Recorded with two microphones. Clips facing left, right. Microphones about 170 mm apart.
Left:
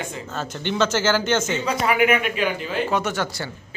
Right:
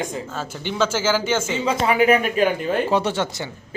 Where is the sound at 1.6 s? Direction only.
30° right (ahead or behind); by 2.8 s 50° right (ahead or behind).